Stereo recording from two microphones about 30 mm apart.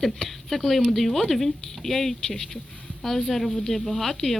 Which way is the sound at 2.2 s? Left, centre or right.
Left.